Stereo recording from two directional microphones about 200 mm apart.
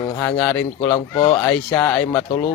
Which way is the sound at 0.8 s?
25° left (ahead or behind).